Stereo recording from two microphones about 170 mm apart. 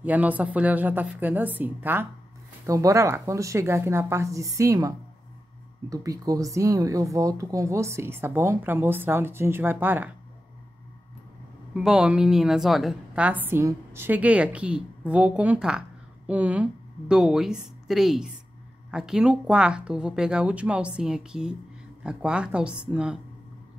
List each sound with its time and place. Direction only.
0.0 s speech: 10° right (ahead or behind)
11.7 s a woman's voice: 5° right (ahead or behind)